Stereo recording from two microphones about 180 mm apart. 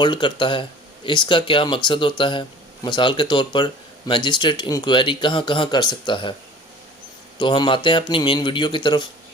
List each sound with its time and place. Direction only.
0.0 s speech: 25° left (ahead or behind)
7.3 s speech: 25° left (ahead or behind)